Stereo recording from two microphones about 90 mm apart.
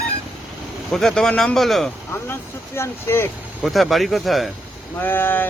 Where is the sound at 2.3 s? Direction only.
30° left (ahead or behind).